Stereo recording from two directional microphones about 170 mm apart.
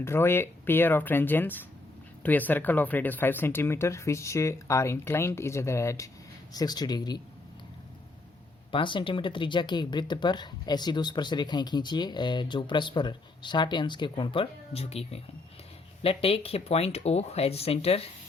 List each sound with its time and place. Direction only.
0.0 s speech: 15° left (ahead or behind)
8.7 s speech: 30° left (ahead or behind)